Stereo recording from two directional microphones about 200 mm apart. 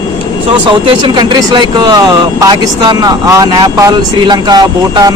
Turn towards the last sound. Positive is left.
turn(degrees=-20)  # may be behind; listen again after turning